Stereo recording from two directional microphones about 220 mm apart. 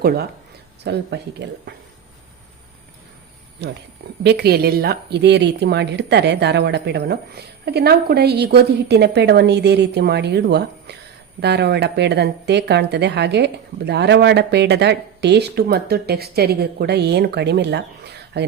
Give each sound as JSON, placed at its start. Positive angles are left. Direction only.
{"t": 0.9, "sound": "speech", "side_deg": -50}
{"t": 3.6, "sound": "speech", "side_deg": -50}